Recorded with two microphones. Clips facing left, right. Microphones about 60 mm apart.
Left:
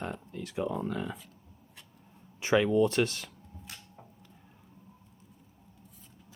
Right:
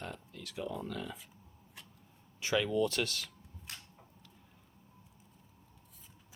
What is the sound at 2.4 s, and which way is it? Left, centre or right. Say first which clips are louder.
Speech: left 6 dB; left.